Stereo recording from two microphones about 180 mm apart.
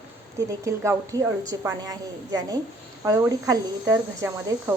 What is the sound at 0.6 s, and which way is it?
A woman's voice, 15° right (ahead or behind).